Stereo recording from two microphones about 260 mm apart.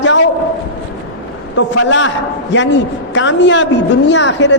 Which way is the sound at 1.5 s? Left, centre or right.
Left.